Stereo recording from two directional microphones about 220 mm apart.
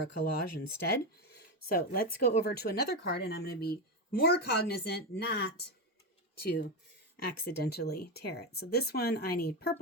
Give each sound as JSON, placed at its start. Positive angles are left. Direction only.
{"t": 0.2, "sound": "speech", "side_deg": 45}